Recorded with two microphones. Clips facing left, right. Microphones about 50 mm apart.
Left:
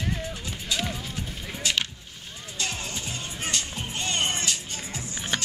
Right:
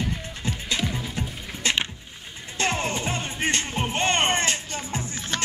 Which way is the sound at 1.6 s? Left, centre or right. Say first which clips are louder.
Right 3 dB; right.